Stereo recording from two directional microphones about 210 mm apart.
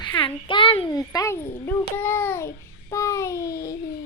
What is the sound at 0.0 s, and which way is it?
A child's voice, 25° left (ahead or behind).